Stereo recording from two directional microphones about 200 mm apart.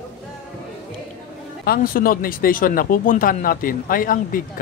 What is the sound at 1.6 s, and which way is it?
Speech, 50° left (ahead or behind).